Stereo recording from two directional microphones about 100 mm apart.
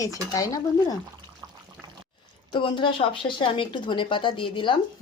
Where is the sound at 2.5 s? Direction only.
55° left (ahead or behind).